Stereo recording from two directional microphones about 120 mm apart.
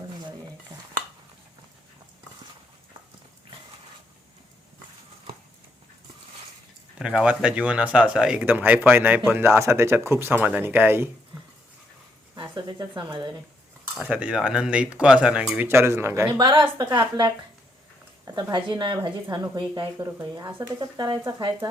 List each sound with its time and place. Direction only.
7.0 s speech: 5° right (ahead or behind)
12.4 s speech: 35° right (ahead or behind)
14.0 s speech: 10° right (ahead or behind)
16.4 s speech: 40° right (ahead or behind)
18.5 s speech: 40° right (ahead or behind)
20.0 s speech: 25° right (ahead or behind)
20.7 s speech: 35° right (ahead or behind)